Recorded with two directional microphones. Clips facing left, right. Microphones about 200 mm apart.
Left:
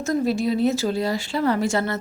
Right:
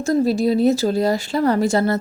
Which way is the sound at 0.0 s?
35° right (ahead or behind).